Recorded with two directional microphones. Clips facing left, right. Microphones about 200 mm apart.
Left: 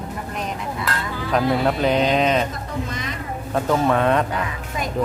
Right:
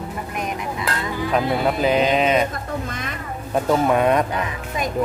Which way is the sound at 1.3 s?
5° right (ahead or behind).